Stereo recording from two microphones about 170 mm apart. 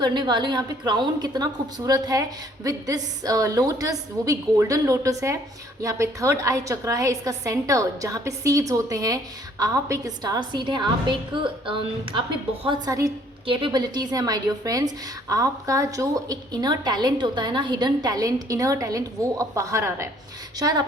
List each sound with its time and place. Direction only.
0.0 s a woman's voice: 25° right (ahead or behind)